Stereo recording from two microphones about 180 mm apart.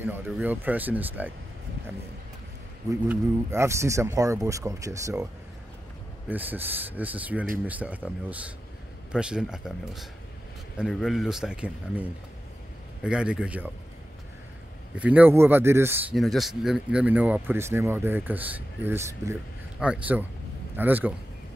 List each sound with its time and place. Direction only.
0.0 s speech: 10° right (ahead or behind)
3.1 s speech: 15° right (ahead or behind)
6.2 s speech: 10° right (ahead or behind)
15.0 s speech: 5° right (ahead or behind)
16.2 s speech: centre (ahead or behind)